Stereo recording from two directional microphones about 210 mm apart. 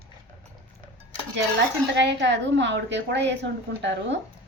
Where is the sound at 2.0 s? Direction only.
55° right (ahead or behind).